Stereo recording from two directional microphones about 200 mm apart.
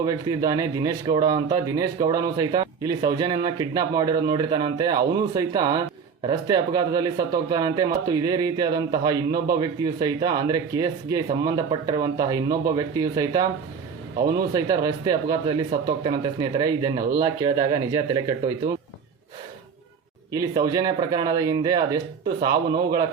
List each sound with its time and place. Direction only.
0.0 s speech: 20° right (ahead or behind)
20.3 s speech: 20° right (ahead or behind)